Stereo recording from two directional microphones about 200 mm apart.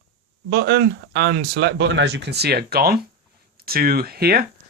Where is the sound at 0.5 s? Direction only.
55° right (ahead or behind).